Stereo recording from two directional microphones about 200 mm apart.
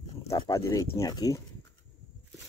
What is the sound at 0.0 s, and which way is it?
Speech, 20° left (ahead or behind).